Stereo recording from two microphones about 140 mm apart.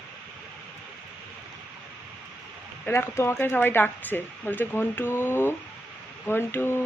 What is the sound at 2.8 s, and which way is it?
Speech, 20° left (ahead or behind).